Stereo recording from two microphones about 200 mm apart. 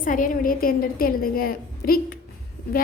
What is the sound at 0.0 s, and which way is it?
A woman's voice, 40° left (ahead or behind).